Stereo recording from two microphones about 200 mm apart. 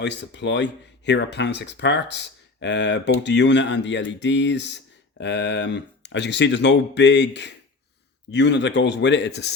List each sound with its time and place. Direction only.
0.0 s speech: 60° left (ahead or behind)